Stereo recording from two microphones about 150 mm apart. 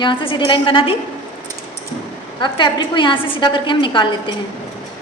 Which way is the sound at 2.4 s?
30° left (ahead or behind).